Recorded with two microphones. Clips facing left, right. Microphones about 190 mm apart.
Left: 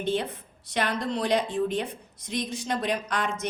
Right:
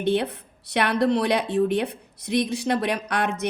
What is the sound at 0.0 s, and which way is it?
A woman's voice, 65° right (ahead or behind).